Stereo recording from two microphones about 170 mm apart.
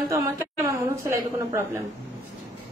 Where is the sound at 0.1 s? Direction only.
15° right (ahead or behind).